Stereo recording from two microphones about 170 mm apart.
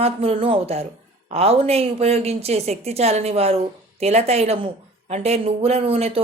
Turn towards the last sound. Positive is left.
turn(degrees=-35)  # may be behind; listen again after turning